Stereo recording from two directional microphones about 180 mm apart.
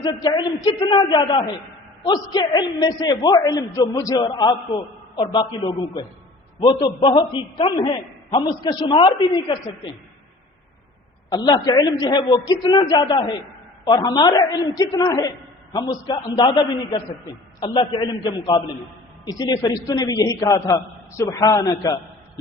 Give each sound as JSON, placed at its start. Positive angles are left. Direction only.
{"t": 0.0, "sound": "a man's voice", "side_deg": 25}
{"t": 11.3, "sound": "a man's voice", "side_deg": 20}
{"t": 17.6, "sound": "a man's voice", "side_deg": 25}